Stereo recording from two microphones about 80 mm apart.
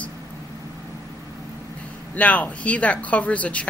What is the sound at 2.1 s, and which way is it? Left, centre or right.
Speech, centre.